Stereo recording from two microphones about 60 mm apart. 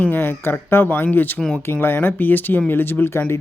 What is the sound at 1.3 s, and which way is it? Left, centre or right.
Speech, centre.